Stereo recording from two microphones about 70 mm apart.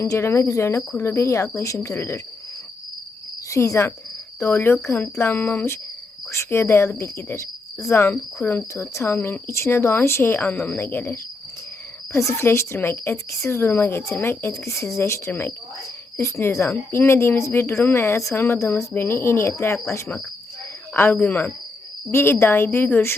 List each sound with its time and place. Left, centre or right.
0.0 s speech: left
3.5 s speech: left
6.3 s speech: left
8.7 s speech: left
20.9 s speech: left
22.1 s speech: left